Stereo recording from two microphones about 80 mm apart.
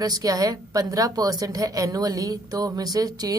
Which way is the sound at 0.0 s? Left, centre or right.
Right.